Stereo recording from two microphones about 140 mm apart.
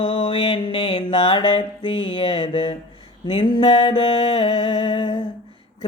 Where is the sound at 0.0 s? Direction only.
40° left (ahead or behind).